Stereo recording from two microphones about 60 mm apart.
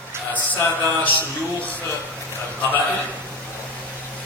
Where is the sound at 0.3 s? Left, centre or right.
Left.